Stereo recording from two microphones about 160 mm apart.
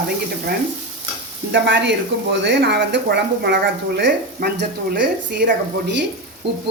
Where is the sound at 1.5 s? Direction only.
90° right.